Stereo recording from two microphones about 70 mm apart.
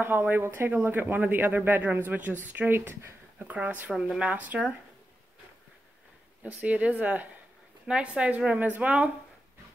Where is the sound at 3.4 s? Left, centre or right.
Right.